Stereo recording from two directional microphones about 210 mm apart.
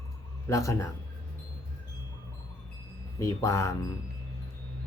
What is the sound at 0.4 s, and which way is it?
Speech, 15° left (ahead or behind).